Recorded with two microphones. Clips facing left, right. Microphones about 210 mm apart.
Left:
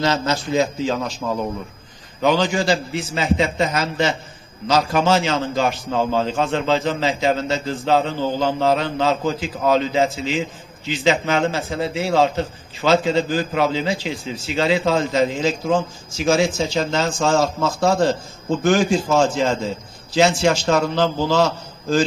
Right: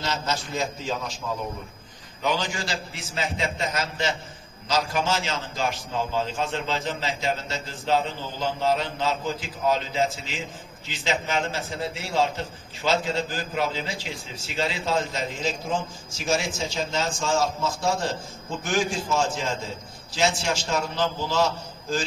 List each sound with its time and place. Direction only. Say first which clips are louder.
0.0 s a man's voice: left 8 dB; 85° left
2.2 s a man's voice: left 10 dB; 75° left (ahead or behind)
14.5 s a man's voice: left 8 dB; 90° left
18.6 s a man's voice: left 9 dB; 70° left (ahead or behind)
20.2 s a man's voice: left 9 dB; 85° left